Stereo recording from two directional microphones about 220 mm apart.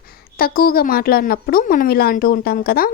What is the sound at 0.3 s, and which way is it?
A woman's voice, 40° left (ahead or behind).